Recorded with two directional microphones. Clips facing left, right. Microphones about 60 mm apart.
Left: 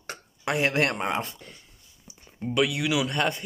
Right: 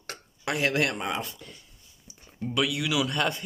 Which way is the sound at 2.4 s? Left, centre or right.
Left.